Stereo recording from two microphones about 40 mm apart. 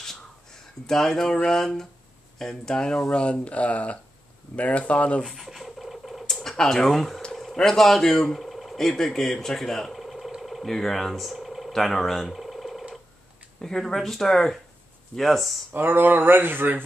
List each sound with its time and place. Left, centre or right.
0.8 s a man's voice: centre
1.3 s speech: left
1.6 s a man's voice: centre; by 5.2 s left
5.2 s a sound: centre
6.2 s typing: centre
6.6 s a man's voice: centre
10.4 s a sound: centre
10.7 s a man's voice: centre
12.3 s a sound: centre
13.6 s a man's voice: centre
15.7 s speech: right